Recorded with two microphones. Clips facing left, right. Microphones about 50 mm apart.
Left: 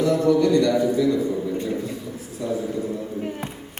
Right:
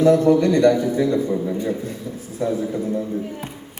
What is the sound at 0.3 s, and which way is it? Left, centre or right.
A man's voice, right.